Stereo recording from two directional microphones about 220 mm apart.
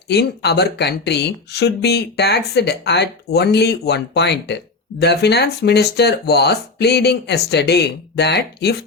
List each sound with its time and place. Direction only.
0.1 s speech: 50° left (ahead or behind)